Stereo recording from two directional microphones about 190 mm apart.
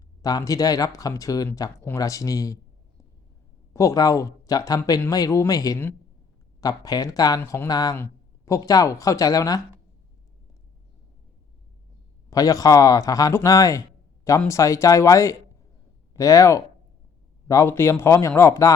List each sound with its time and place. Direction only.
0.2 s speech: 20° left (ahead or behind)
3.7 s speech: 15° left (ahead or behind)
12.3 s speech: 20° left (ahead or behind)